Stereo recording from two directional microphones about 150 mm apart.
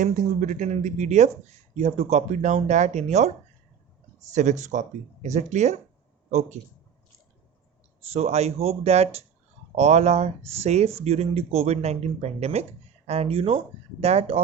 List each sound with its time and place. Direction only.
0.0 s speech: 55° right (ahead or behind)
8.1 s speech: 45° right (ahead or behind)